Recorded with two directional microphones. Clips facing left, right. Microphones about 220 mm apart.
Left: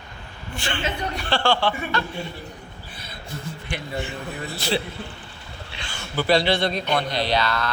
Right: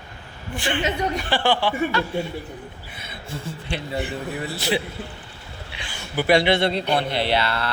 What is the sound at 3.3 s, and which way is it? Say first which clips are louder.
Speech: right 2 dB; 30° right (ahead or behind).